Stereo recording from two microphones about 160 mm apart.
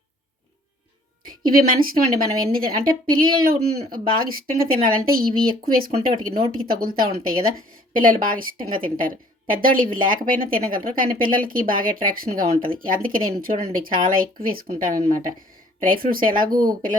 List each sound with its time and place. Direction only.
1.5 s a woman's voice: 65° right (ahead or behind)